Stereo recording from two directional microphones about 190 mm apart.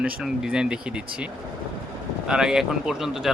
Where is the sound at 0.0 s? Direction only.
5° right (ahead or behind).